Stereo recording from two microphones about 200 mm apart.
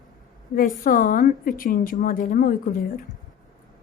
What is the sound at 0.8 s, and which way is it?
A woman's voice, 45° left (ahead or behind).